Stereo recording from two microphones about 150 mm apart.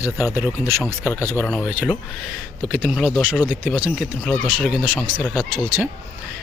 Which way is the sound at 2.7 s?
10° right (ahead or behind).